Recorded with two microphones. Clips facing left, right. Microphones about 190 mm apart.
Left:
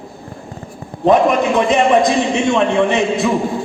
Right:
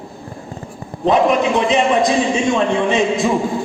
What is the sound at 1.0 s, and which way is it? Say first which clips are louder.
A man's voice: left 2 dB; 50° left (ahead or behind).